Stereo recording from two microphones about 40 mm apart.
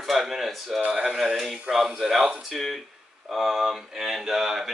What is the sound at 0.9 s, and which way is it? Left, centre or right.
Speech, centre.